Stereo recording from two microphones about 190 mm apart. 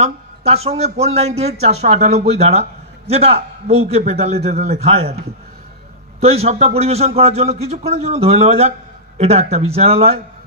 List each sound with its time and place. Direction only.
0.0 s speech: 35° right (ahead or behind)
6.2 s speech: 35° right (ahead or behind)